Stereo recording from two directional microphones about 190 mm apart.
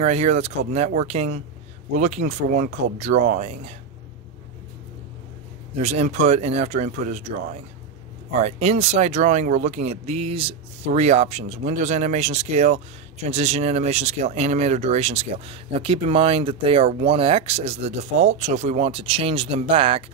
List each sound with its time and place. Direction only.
0.0 s speech: 35° right (ahead or behind)
5.8 s speech: 35° right (ahead or behind)